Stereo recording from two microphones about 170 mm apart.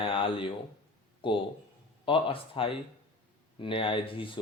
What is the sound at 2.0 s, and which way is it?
Speech, 30° left (ahead or behind).